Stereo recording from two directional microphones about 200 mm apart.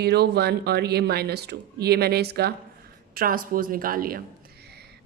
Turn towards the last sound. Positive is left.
turn(degrees=-45)  # may be behind; listen again after turning